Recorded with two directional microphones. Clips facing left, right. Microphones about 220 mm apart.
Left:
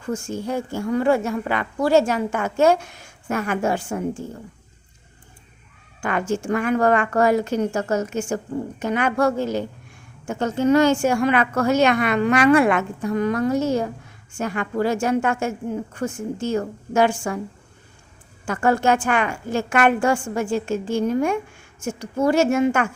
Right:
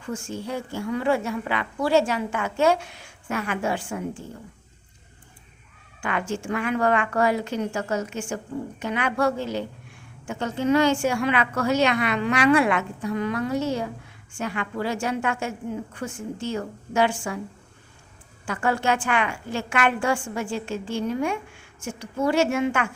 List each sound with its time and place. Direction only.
0.0 s a woman's voice: 45° left (ahead or behind)
6.0 s a woman's voice: 45° left (ahead or behind)
18.4 s a woman's voice: 45° left (ahead or behind)